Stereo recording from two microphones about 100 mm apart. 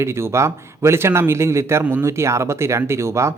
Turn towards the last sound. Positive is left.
turn(degrees=-30)  # may be behind; listen again after turning